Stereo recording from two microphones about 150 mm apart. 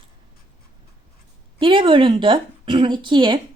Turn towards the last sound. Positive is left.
turn(degrees=-30)  # may be behind; listen again after turning